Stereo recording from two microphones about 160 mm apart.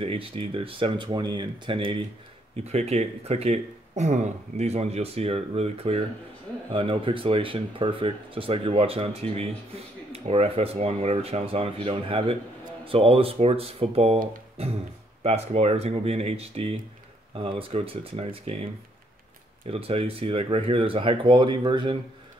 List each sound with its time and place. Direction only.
0.0 s speech: 35° right (ahead or behind)